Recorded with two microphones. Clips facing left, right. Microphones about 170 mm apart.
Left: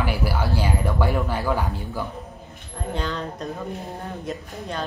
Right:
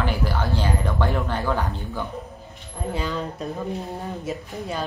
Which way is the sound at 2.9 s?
5° right (ahead or behind).